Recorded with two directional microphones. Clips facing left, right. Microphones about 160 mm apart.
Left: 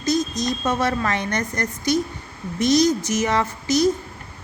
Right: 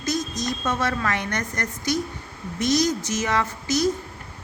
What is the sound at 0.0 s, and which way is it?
A woman's voice, 15° left (ahead or behind).